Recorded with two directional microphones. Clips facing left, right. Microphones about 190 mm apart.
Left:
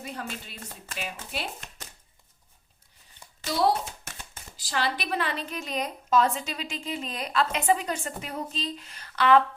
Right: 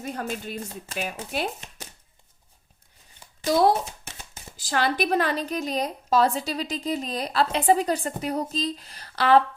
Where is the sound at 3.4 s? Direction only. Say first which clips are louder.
Right 5 dB; 50° right (ahead or behind).